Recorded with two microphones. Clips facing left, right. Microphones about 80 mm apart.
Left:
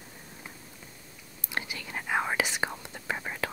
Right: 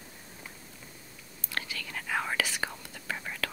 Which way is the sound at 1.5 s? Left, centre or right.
Centre.